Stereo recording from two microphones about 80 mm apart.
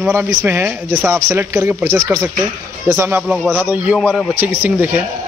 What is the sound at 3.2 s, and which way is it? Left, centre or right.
Speech, centre.